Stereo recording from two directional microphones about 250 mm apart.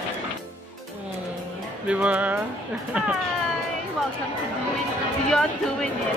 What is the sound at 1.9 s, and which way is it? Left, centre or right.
Speech, centre.